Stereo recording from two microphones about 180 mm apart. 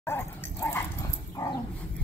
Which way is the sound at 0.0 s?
15° left (ahead or behind).